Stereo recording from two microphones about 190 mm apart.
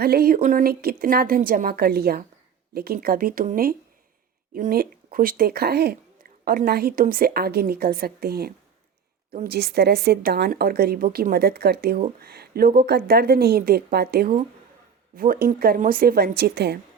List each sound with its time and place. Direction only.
0.0 s a woman's voice: 55° right (ahead or behind)